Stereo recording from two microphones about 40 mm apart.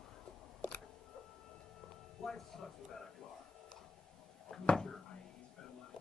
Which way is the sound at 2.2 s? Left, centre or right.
Centre.